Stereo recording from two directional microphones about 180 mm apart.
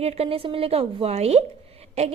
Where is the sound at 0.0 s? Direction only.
35° right (ahead or behind).